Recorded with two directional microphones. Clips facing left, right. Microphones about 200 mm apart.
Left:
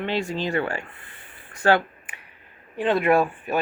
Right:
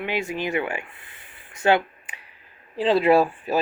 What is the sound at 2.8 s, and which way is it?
Speech, 30° right (ahead or behind).